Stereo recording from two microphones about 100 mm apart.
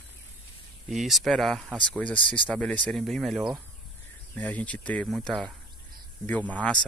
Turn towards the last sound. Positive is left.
turn(degrees=15)  # may be behind; listen again after turning